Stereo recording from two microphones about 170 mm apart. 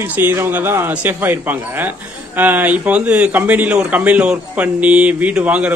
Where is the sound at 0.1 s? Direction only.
10° right (ahead or behind).